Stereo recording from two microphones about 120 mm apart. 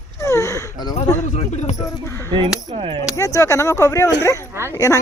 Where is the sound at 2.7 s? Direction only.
60° right (ahead or behind).